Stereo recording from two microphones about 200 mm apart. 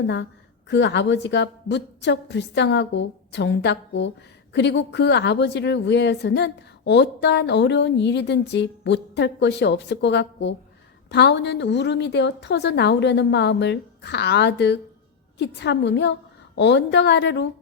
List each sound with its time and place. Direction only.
0.7 s speech: 60° left (ahead or behind)